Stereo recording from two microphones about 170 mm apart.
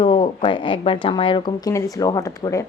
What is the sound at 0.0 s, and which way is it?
A woman's voice, 30° left (ahead or behind).